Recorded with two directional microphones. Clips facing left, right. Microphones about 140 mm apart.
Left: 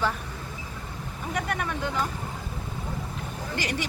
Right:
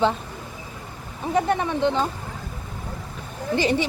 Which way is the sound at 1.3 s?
30° right (ahead or behind).